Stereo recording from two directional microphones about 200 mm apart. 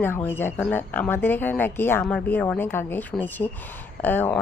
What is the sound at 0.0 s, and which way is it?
Speech, 10° left (ahead or behind).